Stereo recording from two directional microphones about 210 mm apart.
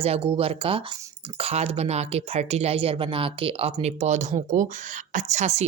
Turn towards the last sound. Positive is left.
turn(degrees=-35)  # may be behind; listen again after turning